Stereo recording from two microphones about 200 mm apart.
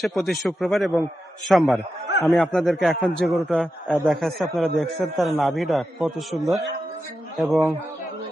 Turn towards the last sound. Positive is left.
turn(degrees=0)  # may be behind; listen again after turning